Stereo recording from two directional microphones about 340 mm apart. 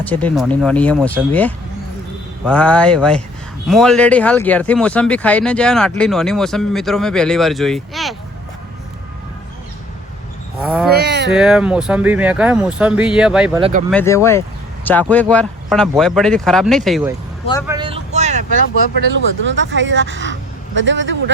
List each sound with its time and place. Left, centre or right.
0.1 s speech: centre
10.6 s a sound: centre
10.9 s a sound: right
11.3 s speech: centre
13.6 s speech: centre
13.9 s speech: centre
17.4 s speech: centre
17.7 s vehicle: centre
19.5 s speech: right